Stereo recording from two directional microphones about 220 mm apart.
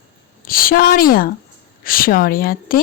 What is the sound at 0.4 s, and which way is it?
A woman's voice, 40° left (ahead or behind).